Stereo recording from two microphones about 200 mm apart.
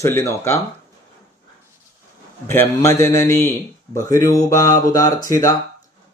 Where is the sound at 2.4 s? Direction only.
15° left (ahead or behind).